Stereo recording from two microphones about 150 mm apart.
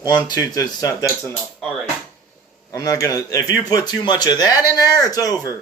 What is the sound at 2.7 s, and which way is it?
Speech, 25° left (ahead or behind).